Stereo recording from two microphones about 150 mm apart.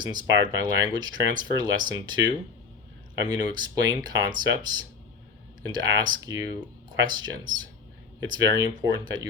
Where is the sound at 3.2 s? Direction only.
25° right (ahead or behind).